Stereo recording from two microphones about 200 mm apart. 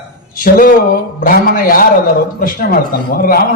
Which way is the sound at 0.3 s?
45° left (ahead or behind).